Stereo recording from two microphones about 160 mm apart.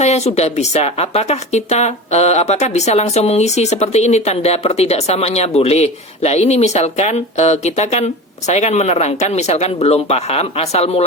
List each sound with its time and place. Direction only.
0.0 s speech: 45° left (ahead or behind)